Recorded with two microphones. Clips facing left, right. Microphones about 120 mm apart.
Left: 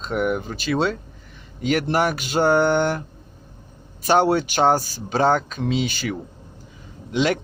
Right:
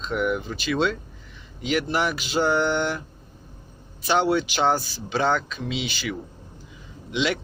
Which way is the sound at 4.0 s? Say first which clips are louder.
Left 4 dB; 45° left (ahead or behind).